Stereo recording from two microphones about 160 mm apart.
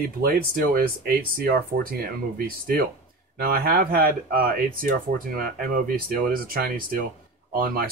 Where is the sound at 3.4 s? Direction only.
70° right (ahead or behind).